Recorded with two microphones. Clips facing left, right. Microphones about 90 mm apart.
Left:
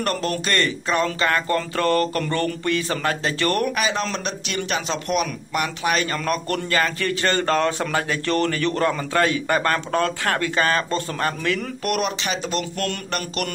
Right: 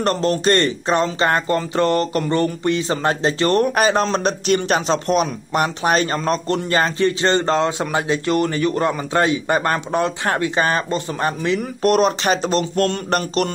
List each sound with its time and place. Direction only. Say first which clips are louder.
0.0 s speech: right 6 dB; 30° right (ahead or behind)
3.7 s speech: right 7 dB; 40° right (ahead or behind)